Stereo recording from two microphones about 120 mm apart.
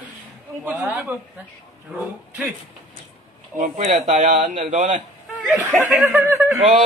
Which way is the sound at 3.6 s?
90° right.